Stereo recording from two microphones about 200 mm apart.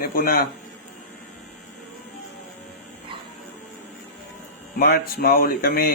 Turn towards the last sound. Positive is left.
turn(degrees=50)  # may be behind; listen again after turning